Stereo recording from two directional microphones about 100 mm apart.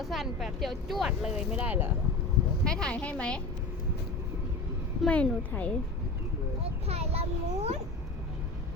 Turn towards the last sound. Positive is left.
turn(degrees=-90)